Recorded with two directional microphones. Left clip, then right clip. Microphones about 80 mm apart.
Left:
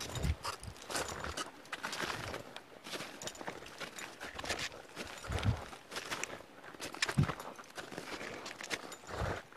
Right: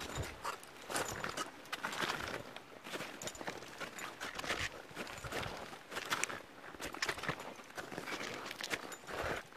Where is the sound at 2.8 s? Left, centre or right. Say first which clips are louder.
Even; centre.